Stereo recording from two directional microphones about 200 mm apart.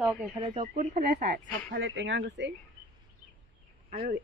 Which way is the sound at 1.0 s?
50° right (ahead or behind).